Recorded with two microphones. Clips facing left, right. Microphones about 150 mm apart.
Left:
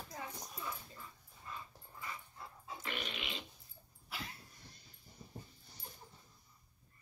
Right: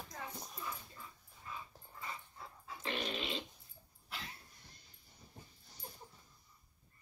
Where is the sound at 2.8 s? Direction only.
35° right (ahead or behind).